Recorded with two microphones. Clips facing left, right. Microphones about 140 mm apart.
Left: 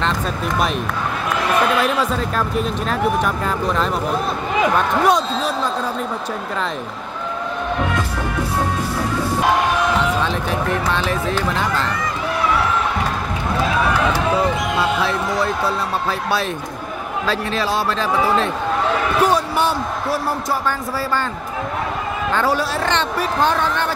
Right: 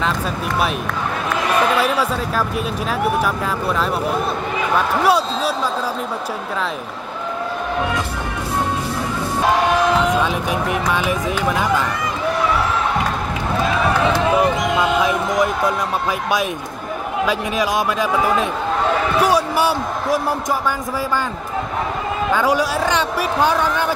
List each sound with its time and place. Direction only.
1.8 s speech: 5° right (ahead or behind)
10.2 s speech: 10° right (ahead or behind)
15.0 s speech: 15° right (ahead or behind)
17.3 s speech: 15° right (ahead or behind)
22.3 s speech: 10° right (ahead or behind)